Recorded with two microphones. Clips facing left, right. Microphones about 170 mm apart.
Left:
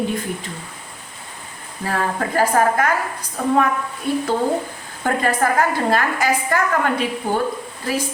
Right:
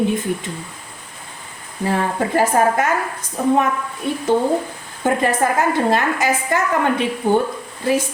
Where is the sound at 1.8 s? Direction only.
20° right (ahead or behind).